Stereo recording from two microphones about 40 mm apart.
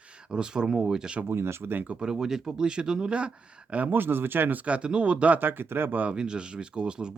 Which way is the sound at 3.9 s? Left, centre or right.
Right.